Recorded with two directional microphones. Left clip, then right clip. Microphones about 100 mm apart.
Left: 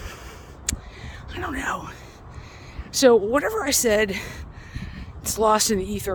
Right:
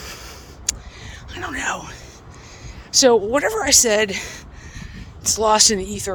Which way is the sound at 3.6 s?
35° left (ahead or behind).